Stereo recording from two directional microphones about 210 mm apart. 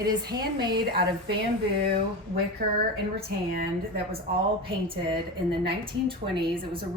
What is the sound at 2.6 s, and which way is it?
Speech, 45° right (ahead or behind).